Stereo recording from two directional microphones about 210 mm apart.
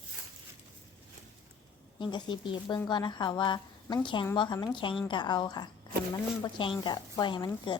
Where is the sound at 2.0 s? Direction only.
20° left (ahead or behind).